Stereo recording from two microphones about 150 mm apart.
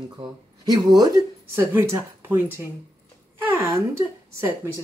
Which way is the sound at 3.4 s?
20° right (ahead or behind).